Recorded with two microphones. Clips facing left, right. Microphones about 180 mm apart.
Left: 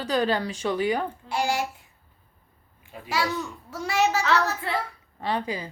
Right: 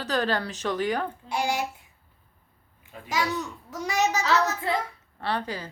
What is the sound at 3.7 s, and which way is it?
Speech, 15° right (ahead or behind).